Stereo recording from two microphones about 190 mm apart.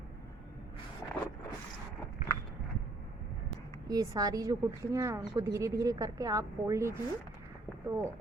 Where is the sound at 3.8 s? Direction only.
20° right (ahead or behind).